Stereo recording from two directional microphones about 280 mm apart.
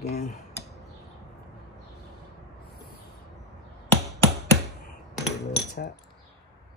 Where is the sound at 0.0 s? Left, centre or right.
Left.